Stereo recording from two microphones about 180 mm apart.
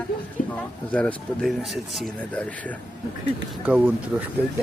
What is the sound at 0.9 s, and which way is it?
Speech, 5° left (ahead or behind).